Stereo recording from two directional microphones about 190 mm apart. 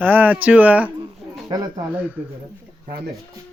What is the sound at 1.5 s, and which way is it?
Speech, 20° right (ahead or behind).